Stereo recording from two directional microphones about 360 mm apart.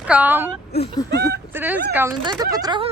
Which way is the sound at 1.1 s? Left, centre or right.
Right.